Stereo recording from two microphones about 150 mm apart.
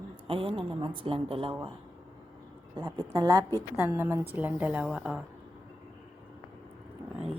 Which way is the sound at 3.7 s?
15° right (ahead or behind).